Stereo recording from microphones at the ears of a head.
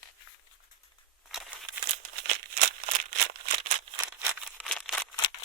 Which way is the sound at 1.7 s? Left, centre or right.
Right.